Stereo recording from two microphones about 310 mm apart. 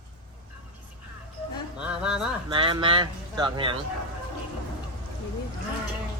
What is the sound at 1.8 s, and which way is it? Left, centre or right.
Speech, centre.